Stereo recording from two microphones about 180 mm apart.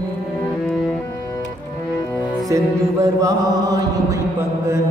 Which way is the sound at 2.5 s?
15° right (ahead or behind).